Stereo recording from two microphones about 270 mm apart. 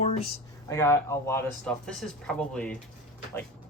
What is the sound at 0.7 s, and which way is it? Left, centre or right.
Speech, centre.